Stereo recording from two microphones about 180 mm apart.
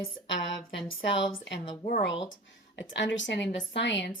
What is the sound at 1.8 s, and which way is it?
Speech, 55° left (ahead or behind).